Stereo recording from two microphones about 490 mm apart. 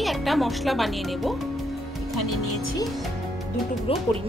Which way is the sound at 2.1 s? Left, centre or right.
Left.